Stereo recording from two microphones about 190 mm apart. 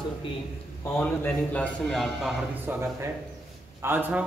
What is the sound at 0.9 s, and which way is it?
A man's voice, 10° left (ahead or behind).